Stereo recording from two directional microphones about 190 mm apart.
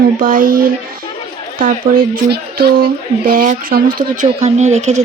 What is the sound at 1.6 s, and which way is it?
A woman's voice, 50° right (ahead or behind).